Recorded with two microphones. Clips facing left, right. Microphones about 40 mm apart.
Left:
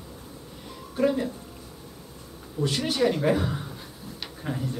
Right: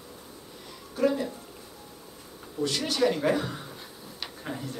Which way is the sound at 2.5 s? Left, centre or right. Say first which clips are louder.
Left 1 dB; centre.